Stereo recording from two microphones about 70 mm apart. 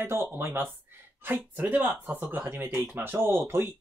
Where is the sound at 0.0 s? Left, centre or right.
Right.